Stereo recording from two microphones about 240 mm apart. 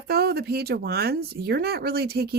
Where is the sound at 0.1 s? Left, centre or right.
Right.